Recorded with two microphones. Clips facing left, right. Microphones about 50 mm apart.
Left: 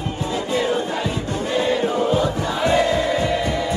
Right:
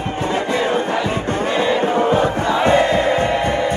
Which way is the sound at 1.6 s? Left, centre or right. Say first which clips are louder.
Right 2 dB; right.